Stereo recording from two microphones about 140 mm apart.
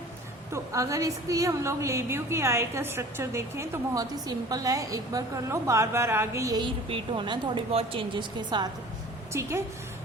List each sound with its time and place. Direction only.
0.5 s a woman's voice: 20° right (ahead or behind)
6.8 s speech: 40° right (ahead or behind)
9.3 s a woman's voice: 20° right (ahead or behind)